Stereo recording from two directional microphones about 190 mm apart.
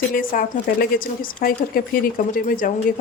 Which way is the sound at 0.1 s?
45° left (ahead or behind).